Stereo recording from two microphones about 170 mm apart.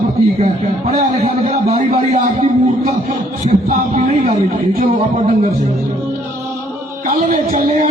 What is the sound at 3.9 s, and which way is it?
Speech, 40° right (ahead or behind).